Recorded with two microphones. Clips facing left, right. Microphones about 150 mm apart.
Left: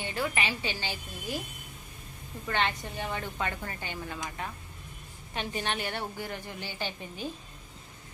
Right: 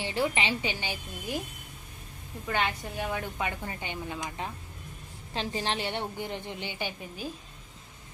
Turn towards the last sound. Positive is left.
turn(degrees=-5)  # may be behind; listen again after turning